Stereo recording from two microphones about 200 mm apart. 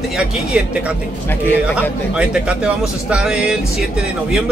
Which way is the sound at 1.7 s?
5° right (ahead or behind).